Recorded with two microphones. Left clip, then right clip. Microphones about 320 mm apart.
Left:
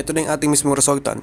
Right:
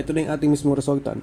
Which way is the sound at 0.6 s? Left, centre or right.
Left.